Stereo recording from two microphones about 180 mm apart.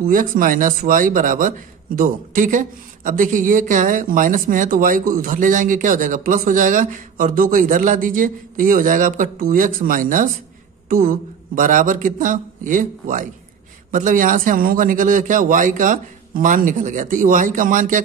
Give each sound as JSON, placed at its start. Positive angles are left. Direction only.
{"t": 0.0, "sound": "speech", "side_deg": -50}